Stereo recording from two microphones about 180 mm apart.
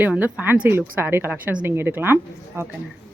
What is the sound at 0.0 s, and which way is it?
Speech, 10° right (ahead or behind).